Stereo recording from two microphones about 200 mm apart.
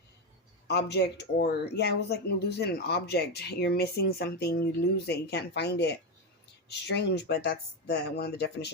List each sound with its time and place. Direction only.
0.7 s speech: 55° left (ahead or behind)